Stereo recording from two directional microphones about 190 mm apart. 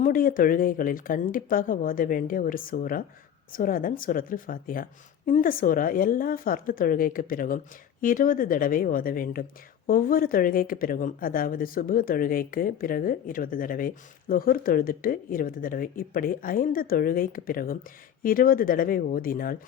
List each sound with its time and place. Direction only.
0.0 s a woman's voice: 45° left (ahead or behind)